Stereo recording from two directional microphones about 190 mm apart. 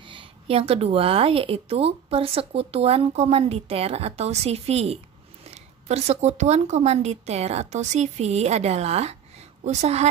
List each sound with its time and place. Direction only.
0.0 s a woman's voice: 25° right (ahead or behind)